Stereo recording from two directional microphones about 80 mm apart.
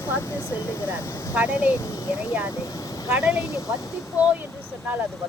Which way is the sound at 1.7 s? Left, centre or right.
Left.